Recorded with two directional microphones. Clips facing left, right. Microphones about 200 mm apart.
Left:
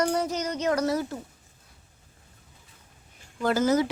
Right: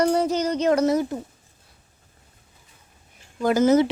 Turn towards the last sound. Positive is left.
turn(degrees=-25)  # may be behind; listen again after turning